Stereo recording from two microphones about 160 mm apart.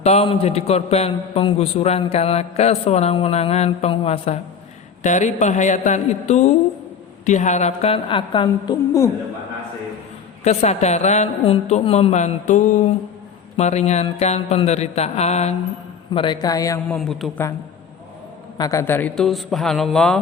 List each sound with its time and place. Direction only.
0.0 s a man's voice: 40° left (ahead or behind)
5.0 s a woman's voice: 50° left (ahead or behind); by 9.0 s 20° left (ahead or behind)
10.4 s a woman's voice: 45° left (ahead or behind)
16.1 s a man's voice: 30° left (ahead or behind)
16.9 s a man's voice: 5° left (ahead or behind)
18.5 s a man's voice: 20° left (ahead or behind); by 20.1 s 5° left (ahead or behind)